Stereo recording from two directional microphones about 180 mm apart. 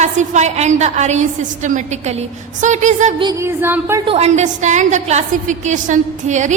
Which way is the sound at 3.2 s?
25° right (ahead or behind).